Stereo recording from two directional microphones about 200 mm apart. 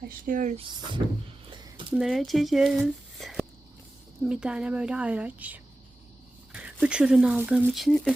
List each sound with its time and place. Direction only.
0.3 s speech: 40° right (ahead or behind)
0.6 s speech: 25° right (ahead or behind)
1.5 s a sound: 25° right (ahead or behind)
2.0 s speech: centre (ahead or behind)